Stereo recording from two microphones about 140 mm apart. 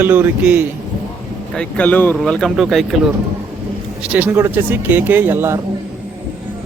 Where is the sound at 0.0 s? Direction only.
15° right (ahead or behind).